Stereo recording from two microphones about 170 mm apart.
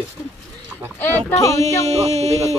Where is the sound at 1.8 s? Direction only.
40° right (ahead or behind).